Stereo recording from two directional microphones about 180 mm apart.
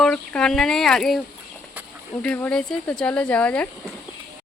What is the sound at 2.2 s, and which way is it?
Speech, 5° left (ahead or behind).